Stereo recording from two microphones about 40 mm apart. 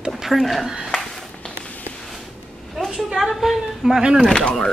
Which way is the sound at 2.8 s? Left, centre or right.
Centre.